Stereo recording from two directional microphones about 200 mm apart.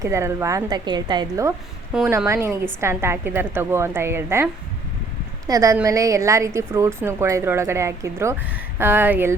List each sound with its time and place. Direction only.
0.0 s a woman's voice: 15° right (ahead or behind)
1.9 s speech: 5° right (ahead or behind)
2.1 s a woman's voice: 15° right (ahead or behind)
5.5 s a woman's voice: 15° right (ahead or behind)